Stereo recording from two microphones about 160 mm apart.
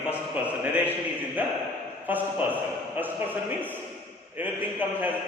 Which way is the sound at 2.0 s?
10° right (ahead or behind).